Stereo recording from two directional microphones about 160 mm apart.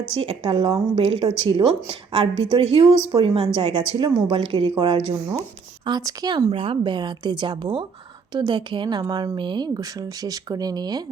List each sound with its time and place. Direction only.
0.1 s a woman's voice: 35° right (ahead or behind)